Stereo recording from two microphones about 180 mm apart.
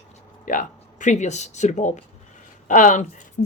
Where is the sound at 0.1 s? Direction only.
45° left (ahead or behind).